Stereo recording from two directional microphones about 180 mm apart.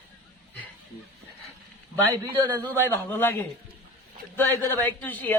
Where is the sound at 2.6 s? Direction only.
10° left (ahead or behind).